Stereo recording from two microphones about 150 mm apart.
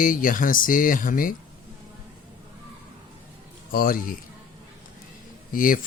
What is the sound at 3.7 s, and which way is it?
Speech, 70° left (ahead or behind).